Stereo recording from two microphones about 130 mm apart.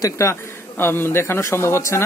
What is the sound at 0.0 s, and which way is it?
A man's voice, 20° left (ahead or behind).